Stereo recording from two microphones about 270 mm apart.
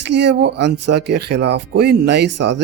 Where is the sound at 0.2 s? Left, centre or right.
Right.